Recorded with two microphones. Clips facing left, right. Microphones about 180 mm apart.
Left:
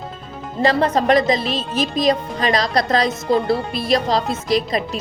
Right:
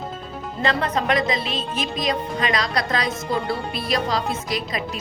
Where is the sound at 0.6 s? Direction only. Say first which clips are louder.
Left 6 dB; 35° left (ahead or behind).